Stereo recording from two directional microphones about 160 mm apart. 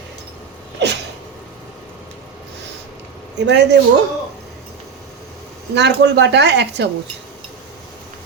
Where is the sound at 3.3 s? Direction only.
90° right.